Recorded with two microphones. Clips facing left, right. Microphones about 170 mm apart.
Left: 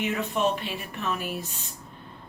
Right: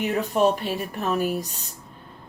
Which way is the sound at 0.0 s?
40° right (ahead or behind).